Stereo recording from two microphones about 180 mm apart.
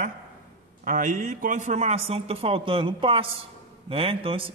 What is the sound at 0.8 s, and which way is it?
A man's voice, 50° right (ahead or behind).